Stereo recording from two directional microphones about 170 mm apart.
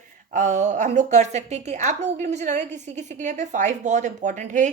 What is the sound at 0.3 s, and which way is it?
Speech, 45° right (ahead or behind).